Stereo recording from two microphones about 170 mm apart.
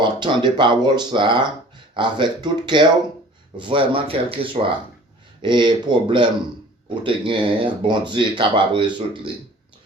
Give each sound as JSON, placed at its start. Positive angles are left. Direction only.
{"t": 0.0, "sound": "speech", "side_deg": -25}